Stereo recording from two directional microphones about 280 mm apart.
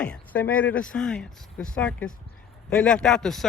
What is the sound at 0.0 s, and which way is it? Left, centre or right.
A man's voice, centre.